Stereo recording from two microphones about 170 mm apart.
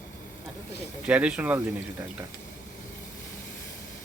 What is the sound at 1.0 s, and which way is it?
Speech, 5° right (ahead or behind).